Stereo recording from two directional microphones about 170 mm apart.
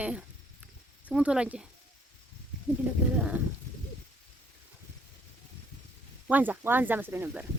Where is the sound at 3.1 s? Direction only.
10° right (ahead or behind).